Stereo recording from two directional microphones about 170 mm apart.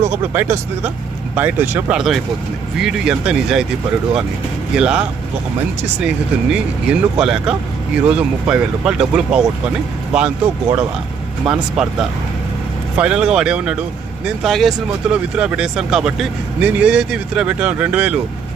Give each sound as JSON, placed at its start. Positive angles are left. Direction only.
{"t": 0.0, "sound": "speech", "side_deg": -15}
{"t": 4.8, "sound": "speech", "side_deg": -5}